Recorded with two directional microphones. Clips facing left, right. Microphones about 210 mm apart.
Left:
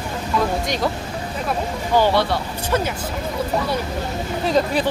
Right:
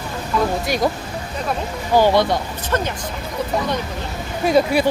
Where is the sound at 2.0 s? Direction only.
15° right (ahead or behind).